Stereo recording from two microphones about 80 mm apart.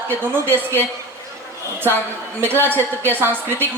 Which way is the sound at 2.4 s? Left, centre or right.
Right.